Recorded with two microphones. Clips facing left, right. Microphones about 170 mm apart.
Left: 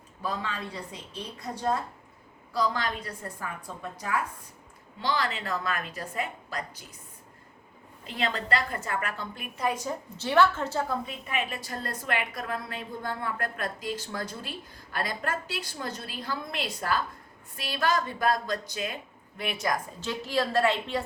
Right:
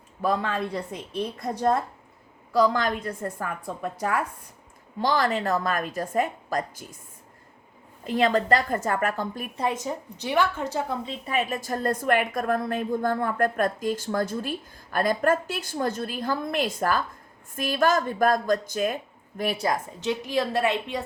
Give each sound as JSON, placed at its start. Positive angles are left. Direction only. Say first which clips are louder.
{"t": 0.2, "sound": "a woman's voice", "louder": "right 8 dB", "side_deg": -55}
{"t": 2.6, "sound": "a woman's voice", "louder": "right 7 dB", "side_deg": -50}
{"t": 4.9, "sound": "a woman's voice", "louder": "right 6 dB", "side_deg": -45}
{"t": 8.0, "sound": "a woman's voice", "louder": "right 9 dB", "side_deg": -45}
{"t": 9.6, "sound": "a woman's voice", "louder": "right 1 dB", "side_deg": -25}
{"t": 11.3, "sound": "a woman's voice", "louder": "right 7 dB", "side_deg": -40}
{"t": 19.4, "sound": "a woman's voice", "louder": "right 4 dB", "side_deg": -35}